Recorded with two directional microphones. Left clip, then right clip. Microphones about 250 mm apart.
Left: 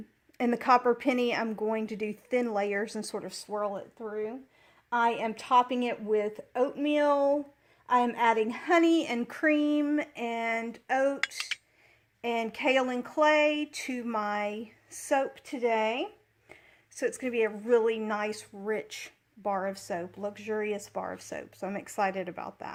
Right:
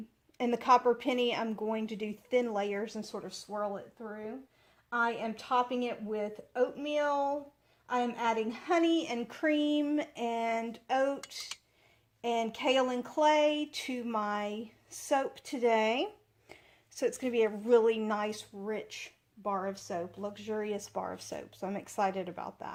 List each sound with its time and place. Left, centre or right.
0.3 s a woman's voice: left
3.1 s speech: left
9.5 s speech: centre
15.2 s a woman's voice: centre
18.3 s speech: left